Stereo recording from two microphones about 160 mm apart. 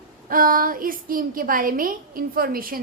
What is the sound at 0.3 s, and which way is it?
A woman's voice, 60° right (ahead or behind).